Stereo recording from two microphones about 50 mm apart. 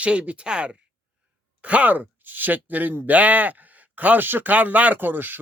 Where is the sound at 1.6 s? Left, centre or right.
Right.